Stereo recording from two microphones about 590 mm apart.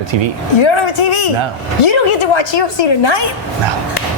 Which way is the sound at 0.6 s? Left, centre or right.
Left.